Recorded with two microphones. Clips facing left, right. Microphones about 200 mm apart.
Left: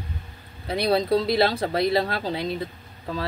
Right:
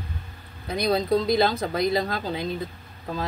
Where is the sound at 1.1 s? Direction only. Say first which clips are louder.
Even; 30° left (ahead or behind).